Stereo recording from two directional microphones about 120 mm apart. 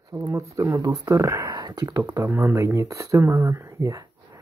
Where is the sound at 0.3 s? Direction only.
25° right (ahead or behind).